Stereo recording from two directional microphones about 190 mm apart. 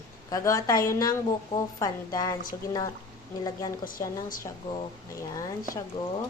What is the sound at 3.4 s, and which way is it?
Speech, 20° left (ahead or behind).